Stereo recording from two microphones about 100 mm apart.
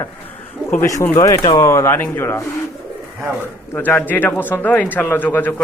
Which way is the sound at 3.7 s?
20° left (ahead or behind).